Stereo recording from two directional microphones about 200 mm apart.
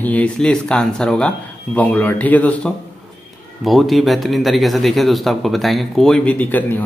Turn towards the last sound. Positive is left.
turn(degrees=10)  # may be behind; listen again after turning